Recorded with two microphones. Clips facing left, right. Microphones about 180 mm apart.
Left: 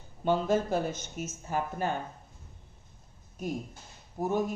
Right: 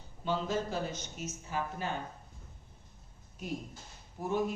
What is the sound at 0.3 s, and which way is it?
Speech, 50° left (ahead or behind).